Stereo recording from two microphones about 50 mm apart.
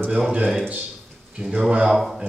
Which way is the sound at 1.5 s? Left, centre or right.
Centre.